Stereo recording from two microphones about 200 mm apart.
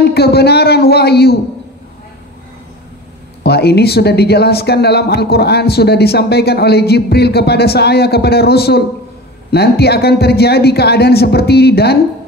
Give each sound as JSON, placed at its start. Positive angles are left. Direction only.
{"t": 0.0, "sound": "speech", "side_deg": 55}
{"t": 3.4, "sound": "speech", "side_deg": 55}